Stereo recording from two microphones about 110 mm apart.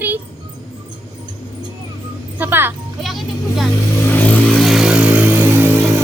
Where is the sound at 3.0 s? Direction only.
Centre (ahead or behind).